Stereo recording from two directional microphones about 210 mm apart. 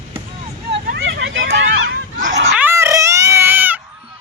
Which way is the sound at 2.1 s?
35° right (ahead or behind).